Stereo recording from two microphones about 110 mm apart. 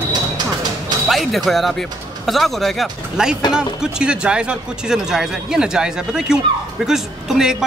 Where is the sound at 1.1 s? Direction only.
Centre (ahead or behind).